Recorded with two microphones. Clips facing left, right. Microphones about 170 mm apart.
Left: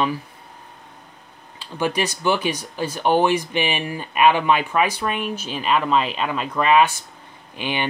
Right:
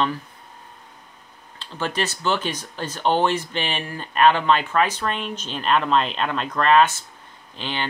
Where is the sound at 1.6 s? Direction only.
10° left (ahead or behind).